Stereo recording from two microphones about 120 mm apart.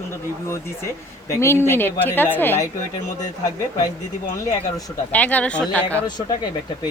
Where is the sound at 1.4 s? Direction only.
20° left (ahead or behind).